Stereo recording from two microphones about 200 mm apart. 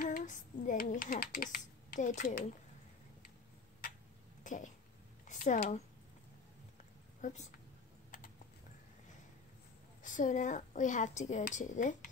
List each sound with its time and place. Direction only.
0.0 s speech: 40° left (ahead or behind)
4.4 s cough: 40° left (ahead or behind)
5.3 s speech: 40° left (ahead or behind)
7.2 s a woman's voice: 40° left (ahead or behind)
10.0 s speech: 40° left (ahead or behind)